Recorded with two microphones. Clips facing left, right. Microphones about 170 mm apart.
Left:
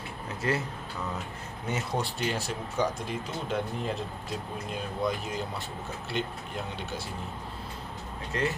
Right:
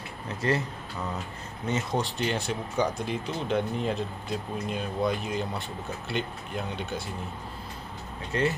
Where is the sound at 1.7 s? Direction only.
10° left (ahead or behind).